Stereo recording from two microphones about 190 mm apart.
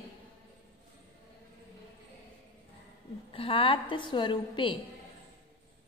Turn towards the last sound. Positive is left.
turn(degrees=25)  # may be behind; listen again after turning